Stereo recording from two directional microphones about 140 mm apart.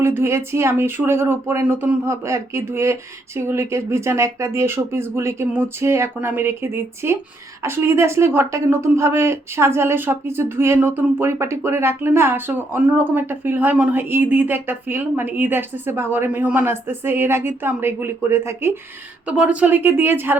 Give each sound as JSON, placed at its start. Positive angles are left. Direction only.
{"t": 0.0, "sound": "a woman's voice", "side_deg": -15}